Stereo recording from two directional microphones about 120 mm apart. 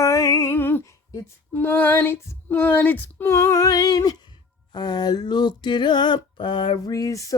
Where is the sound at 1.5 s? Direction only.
15° left (ahead or behind); by 4.2 s 30° left (ahead or behind).